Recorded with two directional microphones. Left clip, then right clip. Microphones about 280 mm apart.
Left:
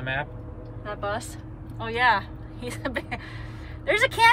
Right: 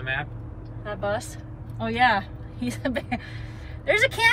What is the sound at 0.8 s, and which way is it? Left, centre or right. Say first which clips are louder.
Speech: right 2 dB; centre.